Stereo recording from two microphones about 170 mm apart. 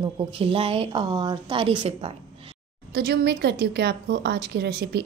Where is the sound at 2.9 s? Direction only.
70° right (ahead or behind).